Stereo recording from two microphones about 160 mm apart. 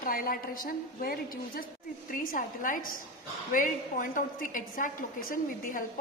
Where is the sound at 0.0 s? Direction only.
65° left (ahead or behind).